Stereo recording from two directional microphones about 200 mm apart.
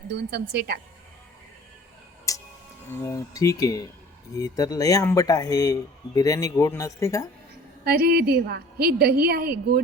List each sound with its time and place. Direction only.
0.1 s a woman's voice: 55° right (ahead or behind)
2.3 s tick-tock: 15° left (ahead or behind)
2.9 s speech: 15° left (ahead or behind)
7.9 s a woman's voice: 50° right (ahead or behind)